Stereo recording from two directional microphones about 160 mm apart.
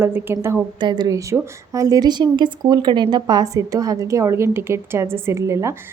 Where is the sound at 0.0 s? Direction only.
15° right (ahead or behind).